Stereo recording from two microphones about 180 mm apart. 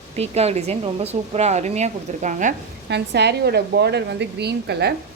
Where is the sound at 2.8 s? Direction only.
70° right (ahead or behind).